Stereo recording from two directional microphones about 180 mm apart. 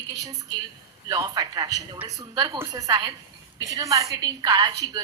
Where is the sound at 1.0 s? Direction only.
20° right (ahead or behind).